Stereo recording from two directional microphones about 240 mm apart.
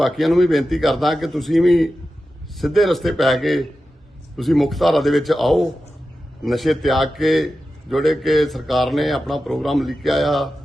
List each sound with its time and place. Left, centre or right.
0.0 s a man's voice: centre